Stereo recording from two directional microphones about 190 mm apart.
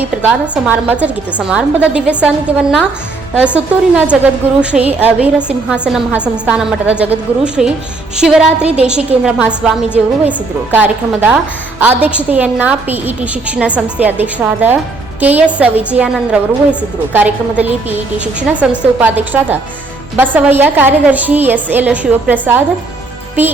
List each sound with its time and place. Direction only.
0.2 s a woman's voice: 5° right (ahead or behind)